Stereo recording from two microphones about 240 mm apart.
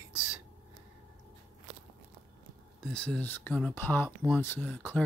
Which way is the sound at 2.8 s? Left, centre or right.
Centre.